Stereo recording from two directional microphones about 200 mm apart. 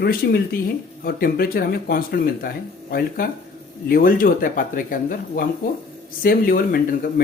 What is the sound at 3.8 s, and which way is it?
Speech, 45° left (ahead or behind).